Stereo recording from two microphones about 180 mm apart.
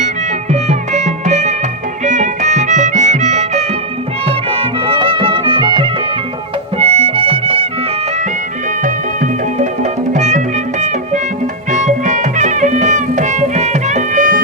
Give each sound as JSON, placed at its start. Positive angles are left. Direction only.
{"t": 0.5, "sound": "music", "side_deg": -40}
{"t": 8.8, "sound": "music", "side_deg": -45}